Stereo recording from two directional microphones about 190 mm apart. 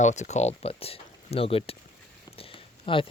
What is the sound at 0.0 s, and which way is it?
Speech, 40° left (ahead or behind).